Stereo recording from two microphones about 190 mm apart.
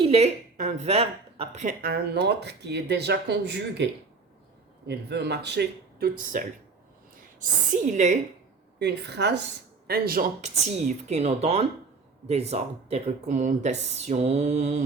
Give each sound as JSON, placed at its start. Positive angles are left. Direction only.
{"t": 0.0, "sound": "speech", "side_deg": -30}
{"t": 1.8, "sound": "speech", "side_deg": -55}
{"t": 4.9, "sound": "speech", "side_deg": -60}
{"t": 7.4, "sound": "speech", "side_deg": -40}
{"t": 8.8, "sound": "speech", "side_deg": -60}
{"t": 10.4, "sound": "speech", "side_deg": -35}